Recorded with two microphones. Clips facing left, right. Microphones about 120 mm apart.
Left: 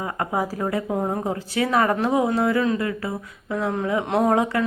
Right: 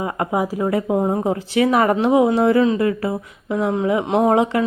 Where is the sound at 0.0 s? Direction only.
20° right (ahead or behind).